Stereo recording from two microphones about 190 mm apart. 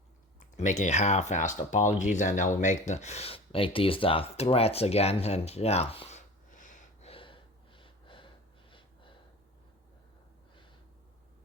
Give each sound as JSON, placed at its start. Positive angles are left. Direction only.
{"t": 0.3, "sound": "speech", "side_deg": 40}
{"t": 8.7, "sound": "gasp", "side_deg": 25}